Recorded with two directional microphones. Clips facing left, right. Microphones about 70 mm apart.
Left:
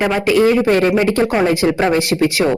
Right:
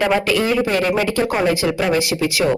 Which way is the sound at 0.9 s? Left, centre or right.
Left.